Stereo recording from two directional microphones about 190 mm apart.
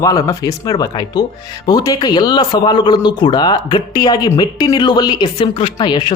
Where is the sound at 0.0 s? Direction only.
15° left (ahead or behind).